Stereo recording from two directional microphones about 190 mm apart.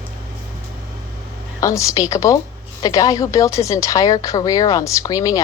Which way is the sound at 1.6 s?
15° left (ahead or behind).